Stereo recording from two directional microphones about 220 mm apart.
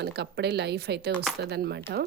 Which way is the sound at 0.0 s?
50° right (ahead or behind).